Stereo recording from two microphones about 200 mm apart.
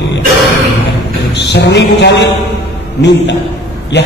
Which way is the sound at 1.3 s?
60° left (ahead or behind).